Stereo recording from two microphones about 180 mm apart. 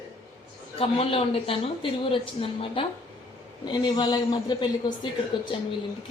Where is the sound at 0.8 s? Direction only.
30° left (ahead or behind).